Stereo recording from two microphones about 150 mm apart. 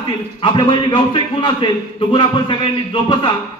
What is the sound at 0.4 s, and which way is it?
A man's voice, 35° left (ahead or behind).